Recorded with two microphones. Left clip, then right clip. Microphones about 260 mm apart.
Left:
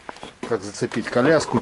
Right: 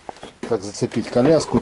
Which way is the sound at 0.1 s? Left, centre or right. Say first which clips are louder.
Even; centre.